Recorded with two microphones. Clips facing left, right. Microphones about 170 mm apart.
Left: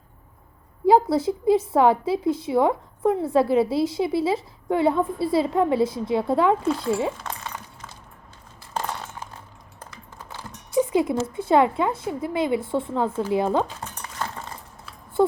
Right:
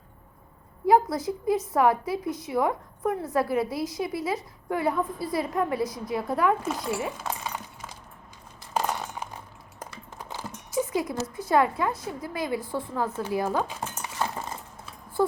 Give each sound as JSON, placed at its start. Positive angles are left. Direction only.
{"t": 0.9, "sound": "a woman's voice", "side_deg": 30}
{"t": 7.2, "sound": "a sound", "side_deg": -10}
{"t": 10.2, "sound": "clip-clop", "side_deg": -15}
{"t": 10.8, "sound": "cowbell", "side_deg": 25}
{"t": 11.3, "sound": "a woman's voice", "side_deg": 25}
{"t": 14.0, "sound": "cutlery", "side_deg": -15}